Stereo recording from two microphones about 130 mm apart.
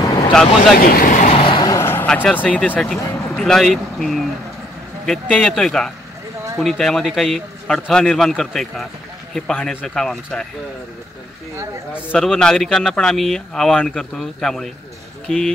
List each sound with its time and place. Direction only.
0.3 s speech: 5° left (ahead or behind)
1.0 s speech: 90° left
1.3 s vehicle: 45° left (ahead or behind)
1.6 s vehicle: 25° left (ahead or behind)
2.0 s speech: 10° left (ahead or behind)
12.2 s speech: 5° left (ahead or behind)